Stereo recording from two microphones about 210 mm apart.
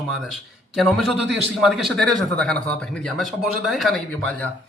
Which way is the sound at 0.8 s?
Centre (ahead or behind).